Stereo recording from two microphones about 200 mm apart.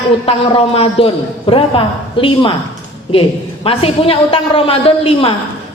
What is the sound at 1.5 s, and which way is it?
A woman's voice, 25° left (ahead or behind).